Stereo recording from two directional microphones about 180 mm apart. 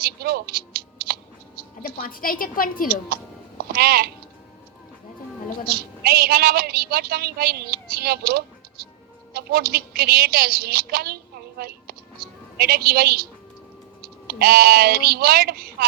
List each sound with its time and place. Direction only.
0.0 s a sound: 60° right (ahead or behind)
1.8 s a woman's voice: 50° left (ahead or behind)
3.7 s a woman's voice: 60° right (ahead or behind)
5.7 s a woman's voice: 60° right (ahead or behind)
8.8 s music: 55° right (ahead or behind)
9.3 s a woman's voice: 60° right (ahead or behind)
14.3 s a woman's voice: 60° right (ahead or behind)